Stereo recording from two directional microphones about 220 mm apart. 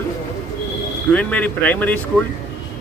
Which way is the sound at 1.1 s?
5° left (ahead or behind).